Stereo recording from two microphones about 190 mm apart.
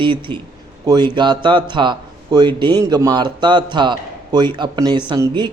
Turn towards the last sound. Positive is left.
turn(degrees=-20)  # may be behind; listen again after turning